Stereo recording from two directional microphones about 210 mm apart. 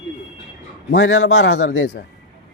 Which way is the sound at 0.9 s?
60° left (ahead or behind).